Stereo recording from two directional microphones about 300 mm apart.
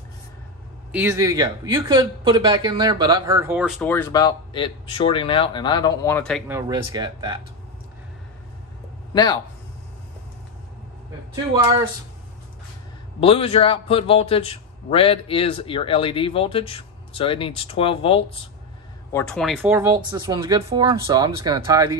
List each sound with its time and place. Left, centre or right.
0.9 s speech: centre
9.1 s speech: centre
11.5 s speech: centre
13.2 s a man's voice: centre
19.1 s speech: centre